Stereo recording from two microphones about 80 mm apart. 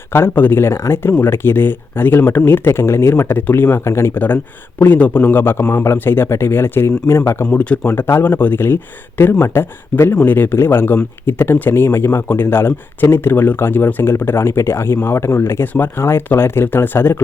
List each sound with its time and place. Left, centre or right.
0.1 s speech: left
7.4 s speech: centre
7.9 s speech: left